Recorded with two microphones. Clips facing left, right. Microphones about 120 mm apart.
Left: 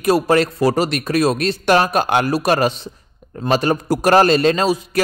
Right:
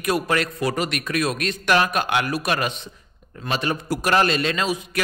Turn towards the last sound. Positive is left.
turn(degrees=35)  # may be behind; listen again after turning